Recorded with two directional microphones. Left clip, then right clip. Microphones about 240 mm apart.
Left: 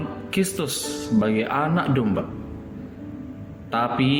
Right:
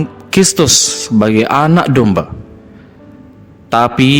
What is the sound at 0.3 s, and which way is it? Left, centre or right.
A man's voice, right.